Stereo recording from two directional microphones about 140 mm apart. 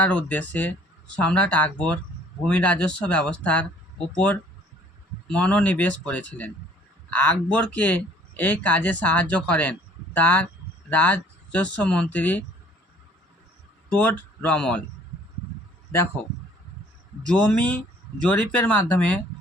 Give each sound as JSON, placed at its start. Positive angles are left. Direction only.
{"t": 0.0, "sound": "speech", "side_deg": 10}
{"t": 13.9, "sound": "speech", "side_deg": 10}
{"t": 17.2, "sound": "speech", "side_deg": 10}